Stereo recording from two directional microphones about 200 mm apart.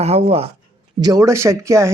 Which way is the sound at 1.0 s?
15° right (ahead or behind).